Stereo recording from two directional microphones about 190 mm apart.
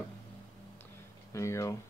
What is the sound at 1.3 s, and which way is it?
Speech, 15° left (ahead or behind).